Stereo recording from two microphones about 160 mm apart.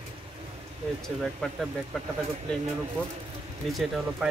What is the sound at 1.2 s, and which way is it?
Speech, centre (ahead or behind).